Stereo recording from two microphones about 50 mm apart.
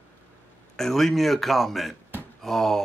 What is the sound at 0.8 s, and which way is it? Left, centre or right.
A man's voice, centre.